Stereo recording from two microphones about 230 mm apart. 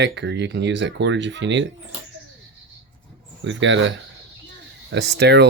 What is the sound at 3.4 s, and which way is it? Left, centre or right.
Speech, right.